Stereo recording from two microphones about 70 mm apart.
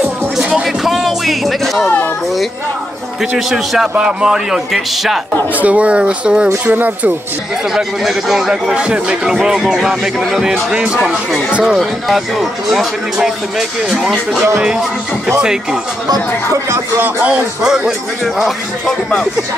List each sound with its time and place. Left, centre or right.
0.4 s music: centre
0.8 s music: centre
3.3 s speech: centre
5.6 s speech: centre
7.7 s speech: centre
11.8 s speech: centre
17.0 s speech: centre
17.6 s speech: centre
18.9 s speech: centre